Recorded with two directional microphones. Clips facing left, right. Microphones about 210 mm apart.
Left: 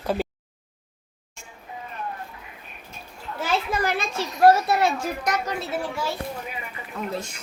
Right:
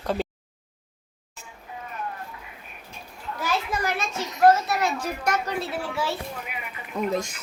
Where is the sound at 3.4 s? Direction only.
30° left (ahead or behind).